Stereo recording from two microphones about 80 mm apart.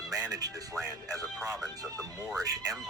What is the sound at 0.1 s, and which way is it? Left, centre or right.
Music, right.